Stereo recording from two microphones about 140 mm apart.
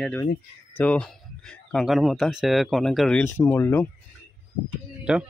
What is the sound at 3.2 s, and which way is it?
Speech, 15° left (ahead or behind).